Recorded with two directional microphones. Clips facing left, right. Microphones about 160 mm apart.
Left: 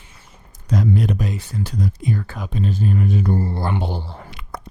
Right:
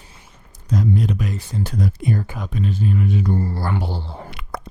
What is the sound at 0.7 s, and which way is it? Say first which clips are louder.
Speech: left 1 dB; 75° left (ahead or behind).